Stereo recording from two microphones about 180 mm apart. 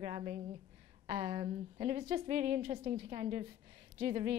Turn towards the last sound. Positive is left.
turn(degrees=-35)  # may be behind; listen again after turning